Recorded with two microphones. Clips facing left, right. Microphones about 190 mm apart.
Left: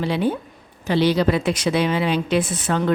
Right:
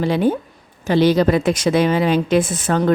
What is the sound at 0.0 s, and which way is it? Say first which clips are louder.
Speech: right 4 dB; 45° right (ahead or behind).